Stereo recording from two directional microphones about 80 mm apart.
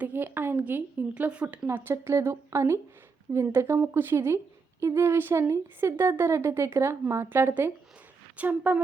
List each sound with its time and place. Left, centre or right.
0.0 s a sound: right
1.1 s speech: centre
1.6 s speech: right